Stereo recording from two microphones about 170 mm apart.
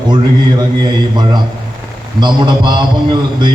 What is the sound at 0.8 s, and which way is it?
A man's voice, 25° right (ahead or behind).